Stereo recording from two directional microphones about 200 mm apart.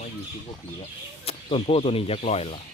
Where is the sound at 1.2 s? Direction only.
30° left (ahead or behind).